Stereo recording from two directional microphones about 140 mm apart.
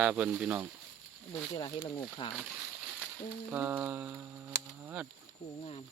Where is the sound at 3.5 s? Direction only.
10° right (ahead or behind).